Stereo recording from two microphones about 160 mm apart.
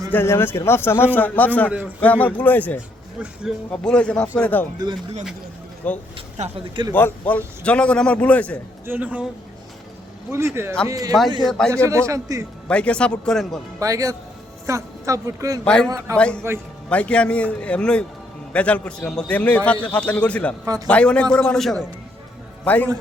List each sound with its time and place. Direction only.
0.1 s a man's voice: 15° left (ahead or behind)
4.8 s a woman's voice: 25° right (ahead or behind)
5.8 s a man's voice: 10° left (ahead or behind)
6.4 s speech: 50° right (ahead or behind)
6.9 s a man's voice: 10° left (ahead or behind)
8.9 s speech: 10° right (ahead or behind)
10.3 s a woman's voice: 15° right (ahead or behind)
11.4 s a man's voice: 5° left (ahead or behind)
11.7 s a woman's voice: 20° right (ahead or behind)
12.6 s a man's voice: 5° left (ahead or behind)
13.7 s a woman's voice: 20° right (ahead or behind)
15.6 s a man's voice: 5° left (ahead or behind)
15.9 s speech: 20° right (ahead or behind)
16.1 s a man's voice: 5° left (ahead or behind)